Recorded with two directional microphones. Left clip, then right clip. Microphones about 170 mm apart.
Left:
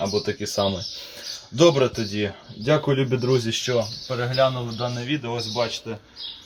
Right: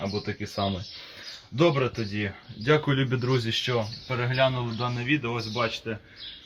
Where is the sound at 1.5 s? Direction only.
15° right (ahead or behind).